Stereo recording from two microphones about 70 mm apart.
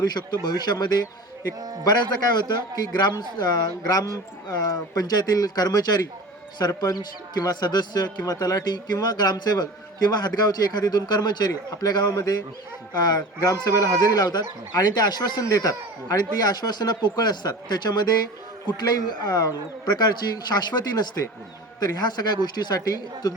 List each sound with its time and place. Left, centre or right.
0.0 s a man's voice: left
1.8 s a man's voice: left
14.2 s a man's voice: left